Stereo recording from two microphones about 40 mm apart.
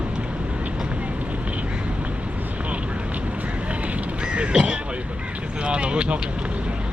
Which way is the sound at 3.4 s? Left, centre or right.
Right.